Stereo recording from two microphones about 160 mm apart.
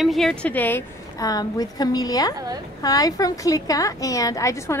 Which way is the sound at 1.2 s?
25° left (ahead or behind).